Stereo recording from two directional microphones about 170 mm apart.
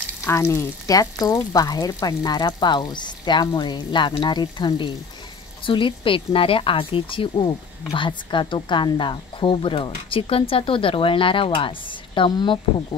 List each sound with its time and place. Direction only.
0.2 s speech: 15° left (ahead or behind)